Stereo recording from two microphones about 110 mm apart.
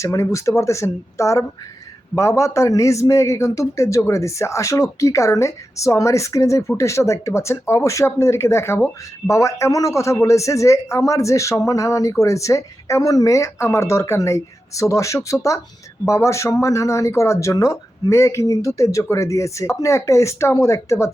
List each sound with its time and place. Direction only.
0.0 s a man's voice: 30° left (ahead or behind)